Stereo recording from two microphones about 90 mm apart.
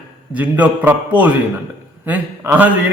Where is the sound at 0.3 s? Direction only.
15° right (ahead or behind).